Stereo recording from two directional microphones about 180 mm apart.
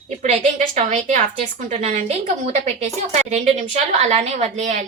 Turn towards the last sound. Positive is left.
turn(degrees=-35)  # may be behind; listen again after turning